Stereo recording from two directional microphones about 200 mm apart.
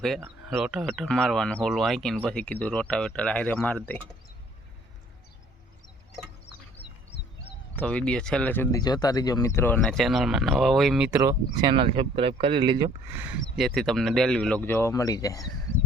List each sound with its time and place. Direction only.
0.5 s speech: 5° right (ahead or behind)
7.8 s speech: 5° left (ahead or behind)
11.2 s speech: 20° right (ahead or behind)
13.6 s speech: centre (ahead or behind); by 15.4 s 15° left (ahead or behind)